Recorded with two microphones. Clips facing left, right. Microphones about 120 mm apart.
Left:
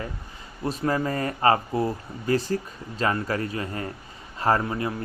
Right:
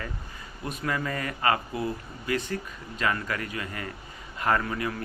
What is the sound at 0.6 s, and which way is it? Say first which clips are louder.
Speech: left 6 dB; 35° left (ahead or behind).